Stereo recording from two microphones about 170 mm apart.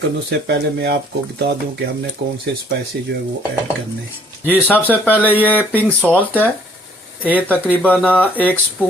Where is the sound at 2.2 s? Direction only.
90° right.